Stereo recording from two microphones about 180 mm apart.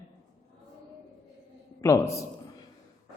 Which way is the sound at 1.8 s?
15° left (ahead or behind).